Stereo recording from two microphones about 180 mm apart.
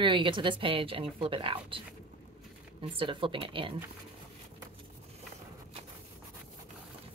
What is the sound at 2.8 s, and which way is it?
Speech, 30° right (ahead or behind).